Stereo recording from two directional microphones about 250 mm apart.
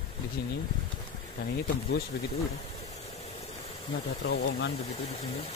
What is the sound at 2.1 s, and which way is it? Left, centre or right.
Speech, left.